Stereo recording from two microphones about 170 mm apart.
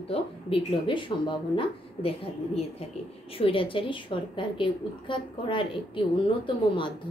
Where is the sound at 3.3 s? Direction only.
30° left (ahead or behind).